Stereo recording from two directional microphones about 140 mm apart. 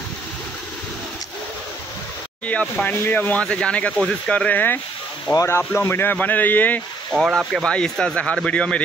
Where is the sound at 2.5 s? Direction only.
10° left (ahead or behind).